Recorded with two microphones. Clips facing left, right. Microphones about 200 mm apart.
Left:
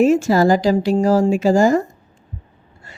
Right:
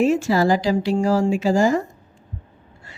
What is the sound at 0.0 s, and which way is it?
Speech, 45° left (ahead or behind).